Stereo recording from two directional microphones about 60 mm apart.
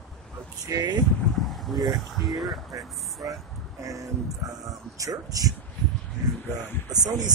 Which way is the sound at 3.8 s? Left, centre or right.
Right.